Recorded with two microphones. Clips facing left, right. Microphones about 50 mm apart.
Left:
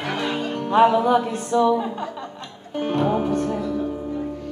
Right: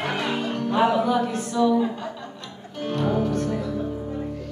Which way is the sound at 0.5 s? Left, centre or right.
Left.